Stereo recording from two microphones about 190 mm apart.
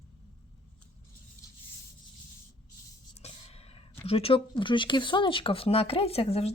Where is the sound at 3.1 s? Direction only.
35° left (ahead or behind).